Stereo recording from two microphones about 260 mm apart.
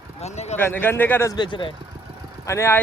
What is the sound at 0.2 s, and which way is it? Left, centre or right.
Speech, left.